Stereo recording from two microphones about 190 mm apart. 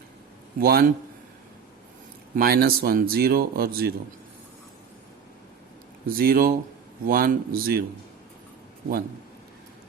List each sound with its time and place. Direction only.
0.6 s speech: 55° right (ahead or behind)
2.3 s speech: 50° right (ahead or behind)
6.1 s speech: 50° right (ahead or behind)